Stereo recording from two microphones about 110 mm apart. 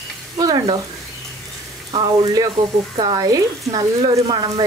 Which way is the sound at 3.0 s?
35° right (ahead or behind).